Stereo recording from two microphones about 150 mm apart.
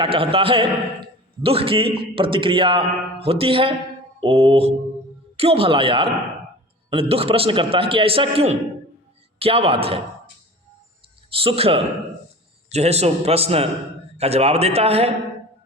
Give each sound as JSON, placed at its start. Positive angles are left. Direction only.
{"t": 0.0, "sound": "a man's voice", "side_deg": -40}
{"t": 11.3, "sound": "a man's voice", "side_deg": -40}